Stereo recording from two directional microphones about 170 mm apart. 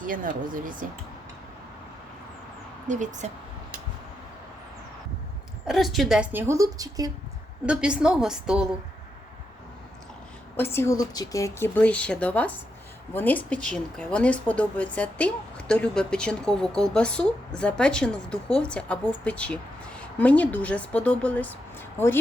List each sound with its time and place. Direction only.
0.0 s speech: 55° right (ahead or behind)
2.8 s speech: 45° right (ahead or behind)
5.6 s a woman's voice: centre (ahead or behind); by 7.1 s 20° right (ahead or behind)
7.6 s a woman's voice: 5° right (ahead or behind)
10.6 s speech: 15° left (ahead or behind)